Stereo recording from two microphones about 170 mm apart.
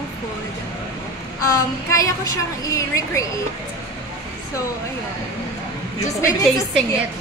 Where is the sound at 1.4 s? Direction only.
20° left (ahead or behind).